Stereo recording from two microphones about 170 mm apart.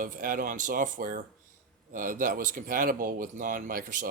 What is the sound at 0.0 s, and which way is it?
Speech, 55° right (ahead or behind).